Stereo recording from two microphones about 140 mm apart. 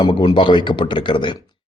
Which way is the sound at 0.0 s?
35° left (ahead or behind).